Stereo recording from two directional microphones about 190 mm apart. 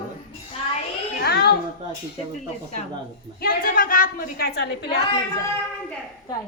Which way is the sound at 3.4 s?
50° left (ahead or behind).